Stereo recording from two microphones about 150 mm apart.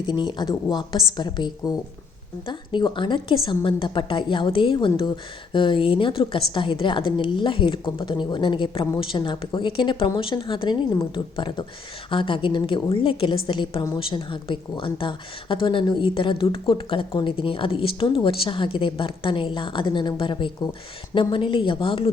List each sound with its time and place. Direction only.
0.0 s a woman's voice: 30° left (ahead or behind)